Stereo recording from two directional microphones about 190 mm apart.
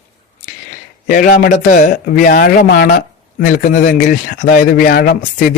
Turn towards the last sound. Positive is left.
turn(degrees=50)  # may be behind; listen again after turning